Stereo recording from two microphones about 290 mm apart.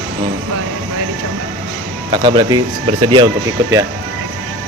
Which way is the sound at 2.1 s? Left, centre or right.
Centre.